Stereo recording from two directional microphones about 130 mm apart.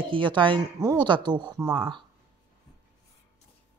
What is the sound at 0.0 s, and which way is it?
A woman's voice, 40° right (ahead or behind).